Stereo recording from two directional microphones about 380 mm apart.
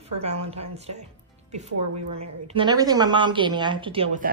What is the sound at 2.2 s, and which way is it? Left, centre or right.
A woman's voice, centre.